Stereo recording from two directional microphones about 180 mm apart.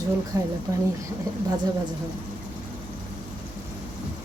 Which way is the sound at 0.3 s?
15° right (ahead or behind).